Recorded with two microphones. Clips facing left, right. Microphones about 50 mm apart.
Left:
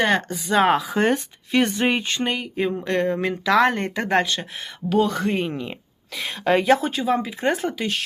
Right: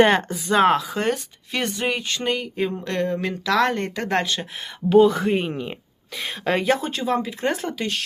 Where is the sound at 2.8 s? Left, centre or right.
Centre.